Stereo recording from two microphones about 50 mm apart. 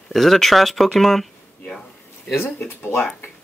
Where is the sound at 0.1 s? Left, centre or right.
Centre.